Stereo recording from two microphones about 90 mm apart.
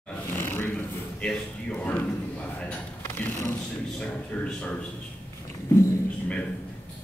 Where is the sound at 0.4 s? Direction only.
25° left (ahead or behind).